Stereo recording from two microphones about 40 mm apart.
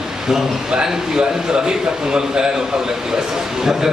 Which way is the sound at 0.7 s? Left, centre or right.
Centre.